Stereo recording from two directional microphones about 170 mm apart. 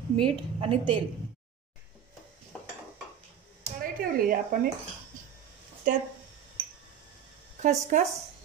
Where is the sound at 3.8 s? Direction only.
55° right (ahead or behind).